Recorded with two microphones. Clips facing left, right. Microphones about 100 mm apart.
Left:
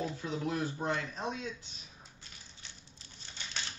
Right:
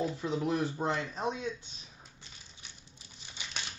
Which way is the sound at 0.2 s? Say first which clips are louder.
Right 4 dB; 25° right (ahead or behind).